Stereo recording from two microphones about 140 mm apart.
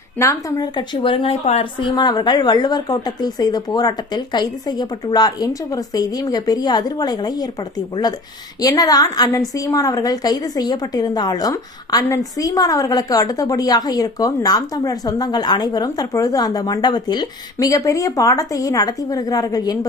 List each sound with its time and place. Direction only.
0.2 s a woman's voice: 20° left (ahead or behind)
8.6 s a woman's voice: 25° left (ahead or behind)